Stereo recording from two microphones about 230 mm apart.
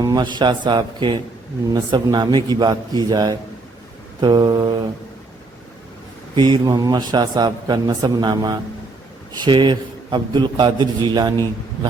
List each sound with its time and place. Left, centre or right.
0.0 s a man's voice: centre
6.3 s a man's voice: centre